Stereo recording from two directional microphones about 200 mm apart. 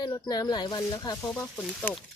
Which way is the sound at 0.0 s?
20° left (ahead or behind).